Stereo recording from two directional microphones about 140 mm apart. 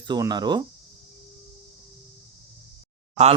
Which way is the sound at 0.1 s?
30° right (ahead or behind).